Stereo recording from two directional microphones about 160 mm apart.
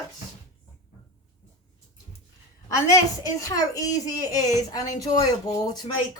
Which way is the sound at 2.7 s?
20° left (ahead or behind).